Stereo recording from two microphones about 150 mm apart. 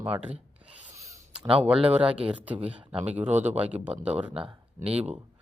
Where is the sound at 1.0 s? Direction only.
20° right (ahead or behind).